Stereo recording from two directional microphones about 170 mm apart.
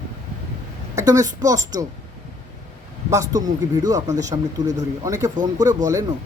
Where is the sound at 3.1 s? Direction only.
20° right (ahead or behind).